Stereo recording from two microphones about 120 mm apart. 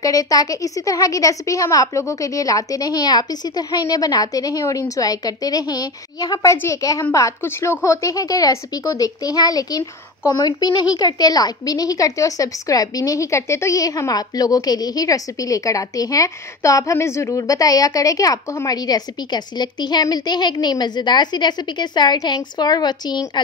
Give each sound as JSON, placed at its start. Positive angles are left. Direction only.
{"t": 0.0, "sound": "a woman's voice", "side_deg": 30}